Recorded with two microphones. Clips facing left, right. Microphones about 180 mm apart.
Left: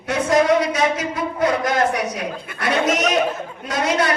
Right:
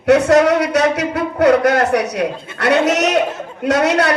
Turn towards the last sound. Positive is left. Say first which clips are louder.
# right 6 dB
turn(degrees=-70)  # may be behind; listen again after turning